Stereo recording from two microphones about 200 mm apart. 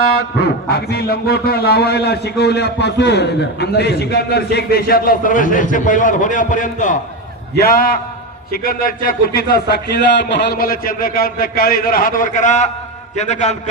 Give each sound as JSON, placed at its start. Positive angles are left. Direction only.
{"t": 0.4, "sound": "a man's voice", "side_deg": 55}